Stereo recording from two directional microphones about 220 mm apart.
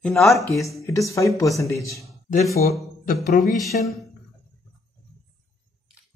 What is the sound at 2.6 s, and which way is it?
Speech, 40° left (ahead or behind).